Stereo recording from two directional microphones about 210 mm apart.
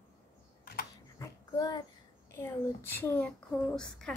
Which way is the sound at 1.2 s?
20° left (ahead or behind).